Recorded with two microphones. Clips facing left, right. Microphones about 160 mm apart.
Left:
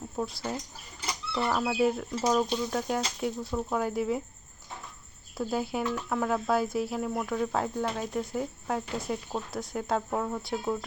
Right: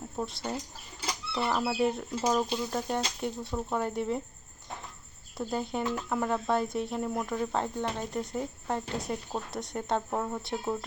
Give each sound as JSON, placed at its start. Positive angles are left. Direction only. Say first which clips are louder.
{"t": 0.2, "sound": "speech", "louder": "left 1 dB", "side_deg": 0}
{"t": 2.0, "sound": "speech", "louder": "left 2 dB", "side_deg": -10}
{"t": 5.4, "sound": "speech", "louder": "left 2 dB", "side_deg": 5}